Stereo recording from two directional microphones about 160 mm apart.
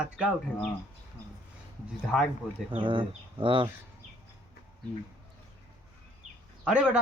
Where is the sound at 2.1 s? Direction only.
Centre (ahead or behind).